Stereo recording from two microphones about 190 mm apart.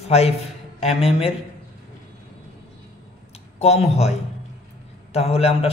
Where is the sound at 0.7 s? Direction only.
30° left (ahead or behind).